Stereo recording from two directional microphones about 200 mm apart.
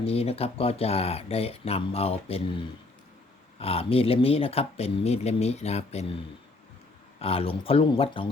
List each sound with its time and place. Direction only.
0.0 s speech: 30° left (ahead or behind)
3.6 s speech: 30° left (ahead or behind)
7.2 s speech: 30° left (ahead or behind)